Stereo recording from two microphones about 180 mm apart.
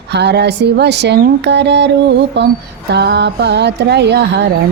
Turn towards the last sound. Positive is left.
turn(degrees=-75)  # may be behind; listen again after turning